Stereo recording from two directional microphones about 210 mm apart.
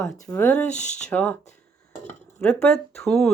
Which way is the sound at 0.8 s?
35° left (ahead or behind).